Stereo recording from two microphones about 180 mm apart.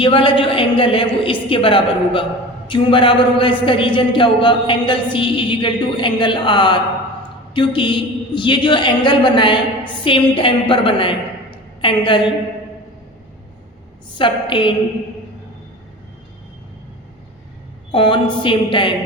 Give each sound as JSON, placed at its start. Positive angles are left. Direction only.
{"t": 0.0, "sound": "a woman's voice", "side_deg": 30}
{"t": 14.2, "sound": "a woman's voice", "side_deg": 25}
{"t": 17.9, "sound": "a woman's voice", "side_deg": 25}